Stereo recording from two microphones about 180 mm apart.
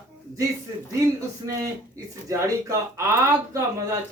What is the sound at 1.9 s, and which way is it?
Speech, 15° right (ahead or behind).